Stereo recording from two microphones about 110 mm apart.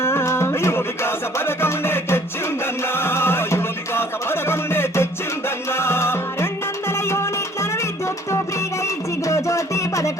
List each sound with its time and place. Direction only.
0.0 s music: 25° left (ahead or behind)
9.2 s music: 30° left (ahead or behind)